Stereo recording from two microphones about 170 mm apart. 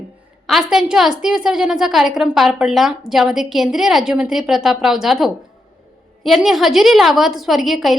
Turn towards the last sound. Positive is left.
turn(degrees=0)  # may be behind; listen again after turning